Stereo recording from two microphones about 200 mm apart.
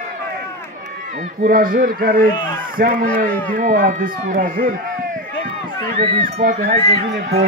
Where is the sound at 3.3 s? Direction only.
5° left (ahead or behind).